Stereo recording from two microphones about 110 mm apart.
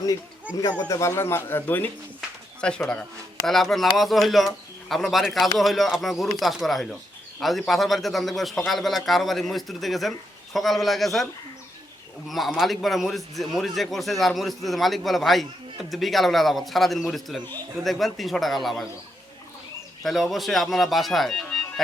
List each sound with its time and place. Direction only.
0.9 s speech: 25° left (ahead or behind); by 11.3 s centre (ahead or behind)
12.3 s speech: centre (ahead or behind)
20.0 s speech: centre (ahead or behind)